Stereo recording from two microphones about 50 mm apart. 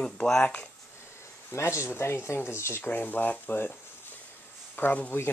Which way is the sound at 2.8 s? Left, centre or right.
Left.